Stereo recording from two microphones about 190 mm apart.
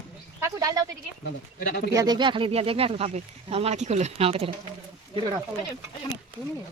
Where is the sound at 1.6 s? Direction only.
50° left (ahead or behind).